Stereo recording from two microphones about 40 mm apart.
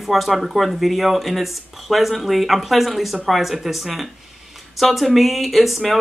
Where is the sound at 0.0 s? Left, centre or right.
Centre.